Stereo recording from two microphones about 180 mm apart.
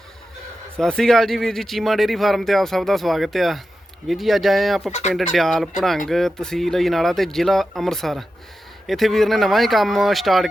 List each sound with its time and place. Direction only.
0.8 s speech: 5° left (ahead or behind)
4.9 s speech: 40° left (ahead or behind)
5.1 s speech: centre (ahead or behind)